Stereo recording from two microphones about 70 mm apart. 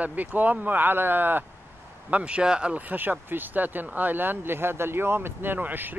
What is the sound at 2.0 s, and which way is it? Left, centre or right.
Speech, centre.